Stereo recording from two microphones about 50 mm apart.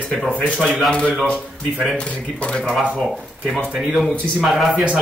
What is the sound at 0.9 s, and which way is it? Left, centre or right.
Speech, left.